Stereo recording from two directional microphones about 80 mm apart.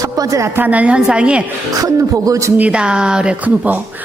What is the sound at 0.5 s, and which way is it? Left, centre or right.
Speech, right.